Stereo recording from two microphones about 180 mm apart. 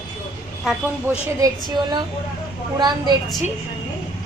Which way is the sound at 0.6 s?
Centre (ahead or behind).